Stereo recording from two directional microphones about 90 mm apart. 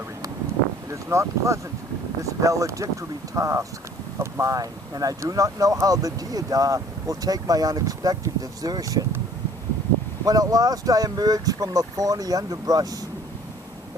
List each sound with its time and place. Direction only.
0.9 s speech: 35° right (ahead or behind)
10.2 s speech: 45° right (ahead or behind)